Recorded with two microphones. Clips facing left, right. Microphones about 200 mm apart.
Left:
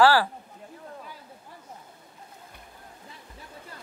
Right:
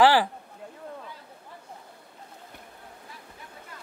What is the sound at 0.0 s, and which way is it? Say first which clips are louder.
Speech: even; 20° right (ahead or behind).